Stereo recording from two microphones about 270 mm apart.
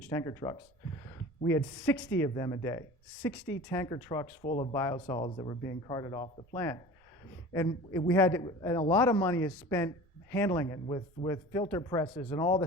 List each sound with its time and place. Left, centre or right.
0.1 s speech: centre